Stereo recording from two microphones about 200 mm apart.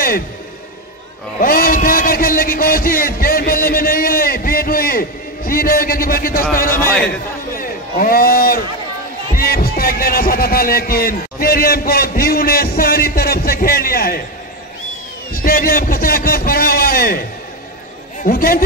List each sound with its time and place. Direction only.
1.4 s a sound: 45° left (ahead or behind)
6.7 s a man's voice: 10° left (ahead or behind)
7.1 s a sound: 45° left (ahead or behind)
9.3 s music: 50° left (ahead or behind)
15.3 s music: 45° left (ahead or behind)
18.2 s music: 45° left (ahead or behind)